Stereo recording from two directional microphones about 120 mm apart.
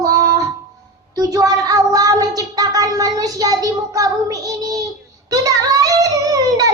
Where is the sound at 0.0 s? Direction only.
30° right (ahead or behind).